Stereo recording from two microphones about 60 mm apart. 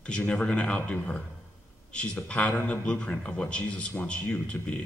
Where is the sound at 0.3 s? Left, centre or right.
Centre.